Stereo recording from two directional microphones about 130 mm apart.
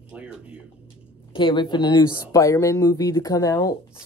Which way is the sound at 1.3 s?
40° left (ahead or behind).